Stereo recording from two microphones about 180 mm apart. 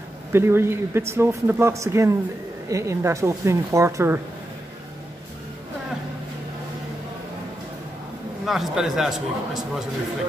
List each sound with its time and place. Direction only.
0.3 s a man's voice: 15° right (ahead or behind)
8.5 s a man's voice: centre (ahead or behind)